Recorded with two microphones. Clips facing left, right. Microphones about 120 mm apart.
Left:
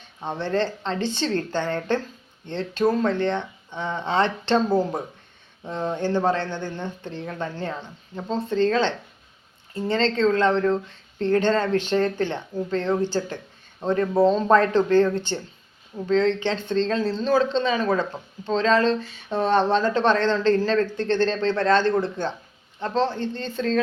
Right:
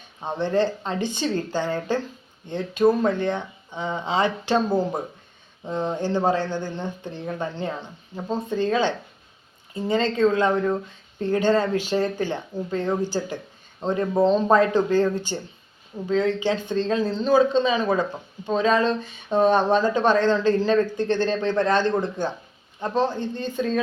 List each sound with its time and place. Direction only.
0.2 s speech: 15° right (ahead or behind)